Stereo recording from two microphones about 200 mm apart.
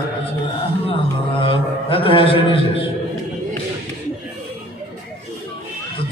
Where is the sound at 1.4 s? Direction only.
25° left (ahead or behind).